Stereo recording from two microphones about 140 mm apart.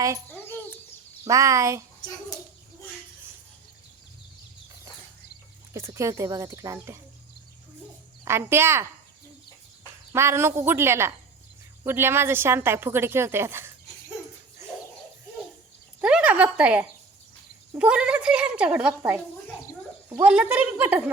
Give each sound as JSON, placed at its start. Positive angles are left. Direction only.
{"t": 0.3, "sound": "a sound", "side_deg": 15}
{"t": 1.2, "sound": "speech", "side_deg": -20}
{"t": 5.7, "sound": "speech", "side_deg": -20}
{"t": 8.2, "sound": "speech", "side_deg": -20}
{"t": 10.1, "sound": "a woman's voice", "side_deg": -20}
{"t": 16.0, "sound": "a woman's voice", "side_deg": -10}
{"t": 20.2, "sound": "a woman's voice", "side_deg": -10}